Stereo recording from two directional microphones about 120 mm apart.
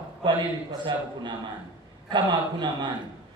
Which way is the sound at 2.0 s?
40° right (ahead or behind).